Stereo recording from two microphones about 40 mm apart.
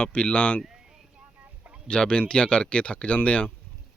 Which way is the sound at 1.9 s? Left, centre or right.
Left.